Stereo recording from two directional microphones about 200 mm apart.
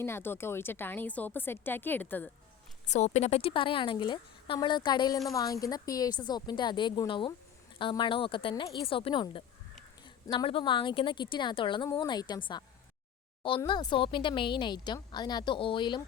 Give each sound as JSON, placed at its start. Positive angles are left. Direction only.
{"t": 0.0, "sound": "a woman's voice", "side_deg": 10}
{"t": 2.8, "sound": "a woman's voice", "side_deg": 35}